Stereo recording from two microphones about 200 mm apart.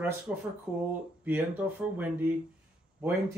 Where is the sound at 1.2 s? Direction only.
10° right (ahead or behind).